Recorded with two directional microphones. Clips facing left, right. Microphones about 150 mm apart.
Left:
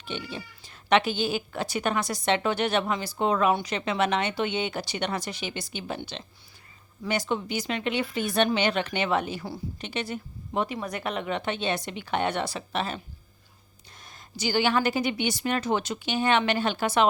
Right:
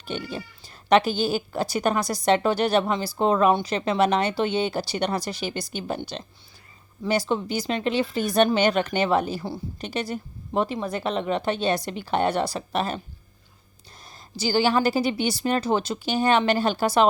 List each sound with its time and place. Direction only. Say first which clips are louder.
0.0 s speech: right 4 dB; 40° right (ahead or behind)
14.0 s speech: right 3 dB; 30° right (ahead or behind)